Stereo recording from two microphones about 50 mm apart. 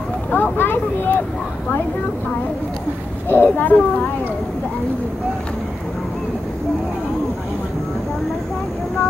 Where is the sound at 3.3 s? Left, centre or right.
Left.